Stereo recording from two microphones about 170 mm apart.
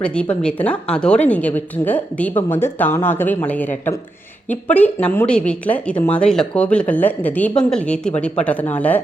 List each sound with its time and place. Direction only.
0.0 s a woman's voice: 5° left (ahead or behind)